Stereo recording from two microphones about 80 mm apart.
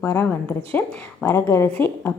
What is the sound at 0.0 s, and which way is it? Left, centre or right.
Speech, left.